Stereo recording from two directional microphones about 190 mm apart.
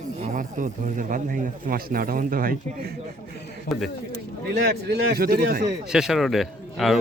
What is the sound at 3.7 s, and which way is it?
Speech, 50° left (ahead or behind).